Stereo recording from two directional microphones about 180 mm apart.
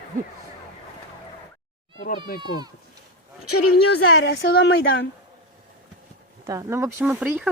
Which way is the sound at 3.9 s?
75° left (ahead or behind).